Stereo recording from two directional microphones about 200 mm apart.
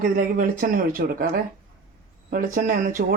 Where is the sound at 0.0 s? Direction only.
40° right (ahead or behind).